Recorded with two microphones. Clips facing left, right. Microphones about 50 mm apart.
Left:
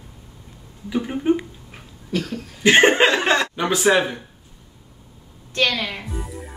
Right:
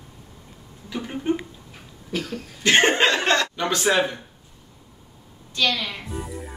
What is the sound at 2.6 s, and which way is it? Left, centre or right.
Speech, centre.